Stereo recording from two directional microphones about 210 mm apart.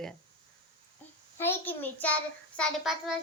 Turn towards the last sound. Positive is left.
turn(degrees=0)  # may be behind; listen again after turning